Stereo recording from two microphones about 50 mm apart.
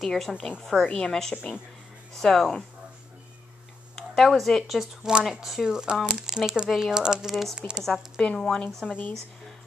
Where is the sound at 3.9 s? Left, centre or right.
Centre.